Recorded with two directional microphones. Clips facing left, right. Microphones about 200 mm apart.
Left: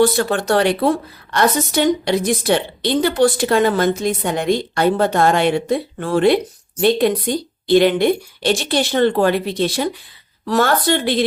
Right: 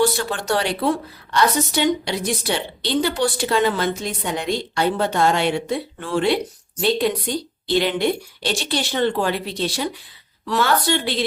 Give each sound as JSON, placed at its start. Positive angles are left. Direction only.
{"t": 0.0, "sound": "a woman's voice", "side_deg": 55}